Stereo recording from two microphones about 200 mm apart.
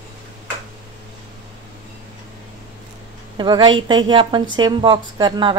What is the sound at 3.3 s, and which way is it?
A woman's voice, 25° right (ahead or behind).